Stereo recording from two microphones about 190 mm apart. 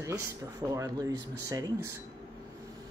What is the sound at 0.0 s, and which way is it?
Speech, 15° right (ahead or behind).